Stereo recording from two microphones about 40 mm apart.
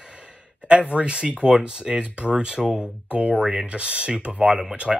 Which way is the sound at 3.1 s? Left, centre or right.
Right.